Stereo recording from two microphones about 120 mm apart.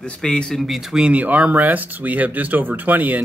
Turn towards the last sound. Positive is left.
turn(degrees=-15)  # may be behind; listen again after turning